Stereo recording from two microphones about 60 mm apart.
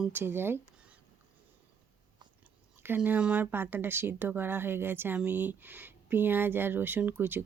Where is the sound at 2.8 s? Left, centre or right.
Right.